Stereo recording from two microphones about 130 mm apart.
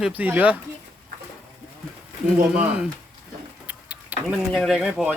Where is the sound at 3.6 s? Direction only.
10° right (ahead or behind).